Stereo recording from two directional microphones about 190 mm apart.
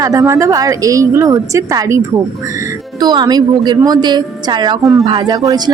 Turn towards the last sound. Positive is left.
turn(degrees=-20)  # may be behind; listen again after turning